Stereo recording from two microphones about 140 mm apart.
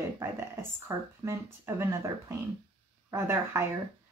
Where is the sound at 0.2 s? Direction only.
15° right (ahead or behind).